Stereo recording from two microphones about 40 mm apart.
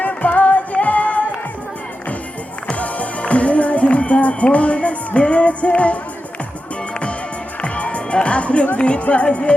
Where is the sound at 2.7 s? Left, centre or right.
Left.